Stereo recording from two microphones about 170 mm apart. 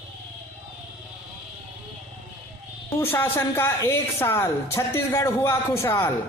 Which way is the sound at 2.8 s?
10° left (ahead or behind).